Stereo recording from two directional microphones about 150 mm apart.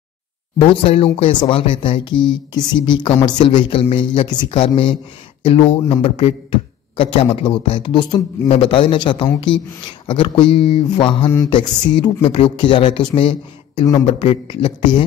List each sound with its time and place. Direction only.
0.6 s speech: 40° left (ahead or behind)
6.5 s a sound: 35° left (ahead or behind)
7.3 s speech: 35° left (ahead or behind)